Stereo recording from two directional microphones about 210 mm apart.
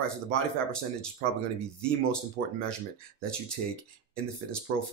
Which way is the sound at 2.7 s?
5° left (ahead or behind).